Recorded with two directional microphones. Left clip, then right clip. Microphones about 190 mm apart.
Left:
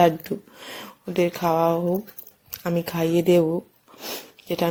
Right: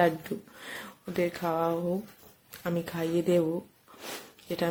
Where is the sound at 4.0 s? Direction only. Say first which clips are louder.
Left 7 dB; 20° left (ahead or behind).